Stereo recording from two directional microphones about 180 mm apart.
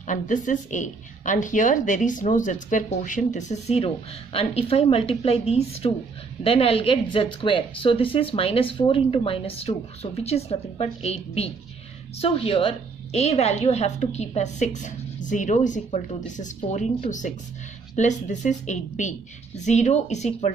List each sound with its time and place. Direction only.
0.0 s a woman's voice: 45° left (ahead or behind)